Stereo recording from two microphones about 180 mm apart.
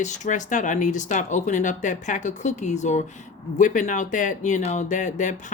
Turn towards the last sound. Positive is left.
turn(degrees=40)  # may be behind; listen again after turning